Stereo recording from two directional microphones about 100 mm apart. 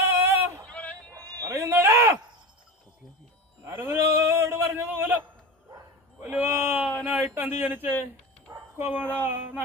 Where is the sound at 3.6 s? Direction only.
25° right (ahead or behind).